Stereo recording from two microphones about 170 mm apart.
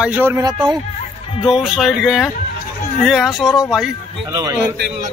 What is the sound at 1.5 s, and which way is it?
Speech, centre (ahead or behind).